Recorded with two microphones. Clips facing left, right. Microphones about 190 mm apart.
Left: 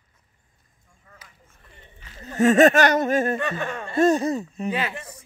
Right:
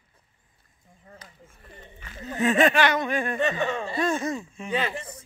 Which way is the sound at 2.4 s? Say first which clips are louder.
Left 5 dB; 45° left (ahead or behind).